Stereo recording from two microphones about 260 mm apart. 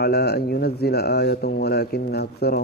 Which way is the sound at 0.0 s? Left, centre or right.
Left.